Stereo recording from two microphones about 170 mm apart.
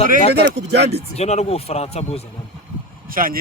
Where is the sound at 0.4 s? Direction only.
80° right.